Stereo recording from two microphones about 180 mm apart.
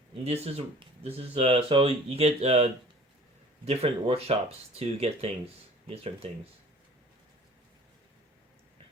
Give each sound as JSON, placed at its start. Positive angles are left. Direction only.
{"t": 0.3, "sound": "speech", "side_deg": -35}
{"t": 3.7, "sound": "speech", "side_deg": -35}